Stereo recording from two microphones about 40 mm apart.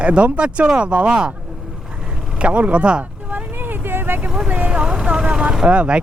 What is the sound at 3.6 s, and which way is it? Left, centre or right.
Vehicle, right.